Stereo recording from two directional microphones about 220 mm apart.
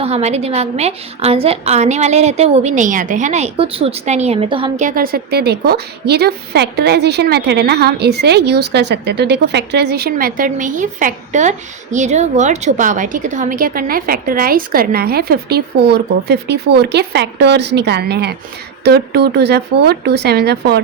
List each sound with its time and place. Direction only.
0.0 s a woman's voice: 30° right (ahead or behind)
4.9 s speech: 40° right (ahead or behind)